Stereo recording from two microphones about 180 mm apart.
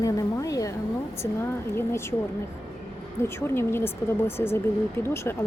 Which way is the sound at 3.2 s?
15° left (ahead or behind).